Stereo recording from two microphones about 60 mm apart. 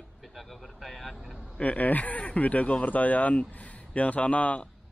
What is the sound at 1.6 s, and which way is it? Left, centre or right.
Speech, left.